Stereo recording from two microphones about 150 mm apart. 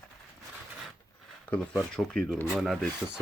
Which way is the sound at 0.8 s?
5° left (ahead or behind).